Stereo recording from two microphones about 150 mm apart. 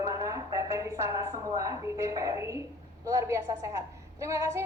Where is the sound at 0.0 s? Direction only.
20° right (ahead or behind).